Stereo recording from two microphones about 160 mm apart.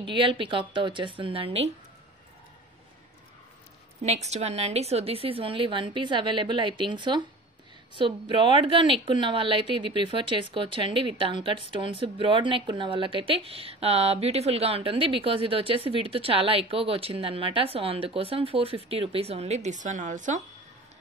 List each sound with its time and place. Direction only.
0.0 s a woman's voice: 30° right (ahead or behind)
4.0 s a woman's voice: 45° right (ahead or behind)